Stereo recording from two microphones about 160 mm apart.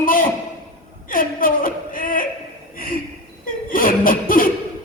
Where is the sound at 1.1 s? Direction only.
60° left (ahead or behind).